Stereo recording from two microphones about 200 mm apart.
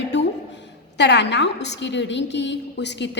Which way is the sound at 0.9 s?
60° left (ahead or behind).